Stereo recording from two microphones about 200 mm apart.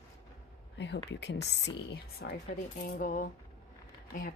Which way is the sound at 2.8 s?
40° left (ahead or behind).